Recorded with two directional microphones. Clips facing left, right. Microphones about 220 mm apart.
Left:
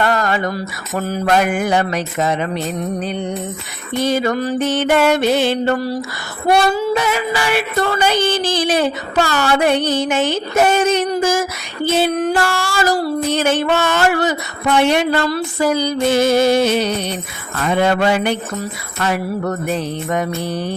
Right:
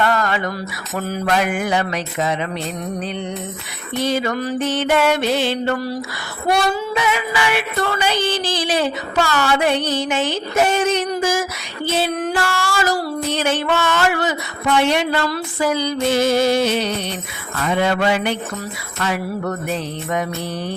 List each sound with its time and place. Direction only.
0.0 s a sound: 40° left (ahead or behind)
1.4 s music: 45° left (ahead or behind)
4.0 s a sound: 45° left (ahead or behind)
4.7 s music: 50° left (ahead or behind)
6.9 s music: 40° left (ahead or behind)
12.2 s a sound: 35° left (ahead or behind)
13.3 s music: 45° left (ahead or behind)
14.8 s music: 50° left (ahead or behind)
15.3 s music: 40° left (ahead or behind)